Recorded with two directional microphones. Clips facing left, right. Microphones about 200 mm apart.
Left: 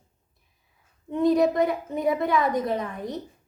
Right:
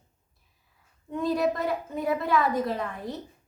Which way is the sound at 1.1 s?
20° left (ahead or behind).